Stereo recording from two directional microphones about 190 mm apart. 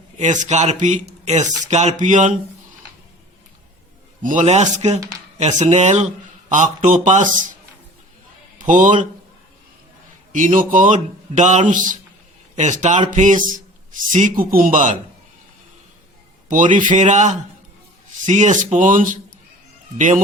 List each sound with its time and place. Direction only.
0.2 s a man's voice: 40° right (ahead or behind)
4.2 s a man's voice: 40° right (ahead or behind)
8.5 s a man's voice: 45° right (ahead or behind)
10.3 s a man's voice: 45° right (ahead or behind)
16.5 s a man's voice: 45° right (ahead or behind)